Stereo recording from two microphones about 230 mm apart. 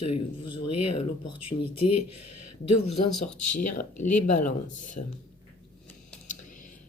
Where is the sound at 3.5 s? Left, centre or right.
Left.